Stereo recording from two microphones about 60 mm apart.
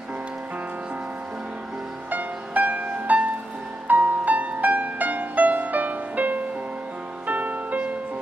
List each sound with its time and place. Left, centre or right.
2.0 s music: right